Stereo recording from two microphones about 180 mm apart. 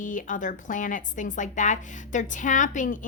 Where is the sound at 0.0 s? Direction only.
45° left (ahead or behind).